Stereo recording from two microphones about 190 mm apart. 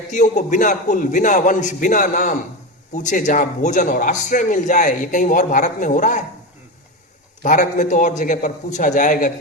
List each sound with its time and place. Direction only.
0.1 s a man's voice: 40° left (ahead or behind)
7.4 s a man's voice: 40° left (ahead or behind)